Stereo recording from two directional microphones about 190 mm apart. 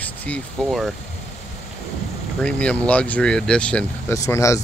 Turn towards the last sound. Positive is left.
turn(degrees=15)  # may be behind; listen again after turning